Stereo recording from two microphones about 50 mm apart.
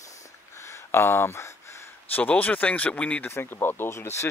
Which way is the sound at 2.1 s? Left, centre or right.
Left.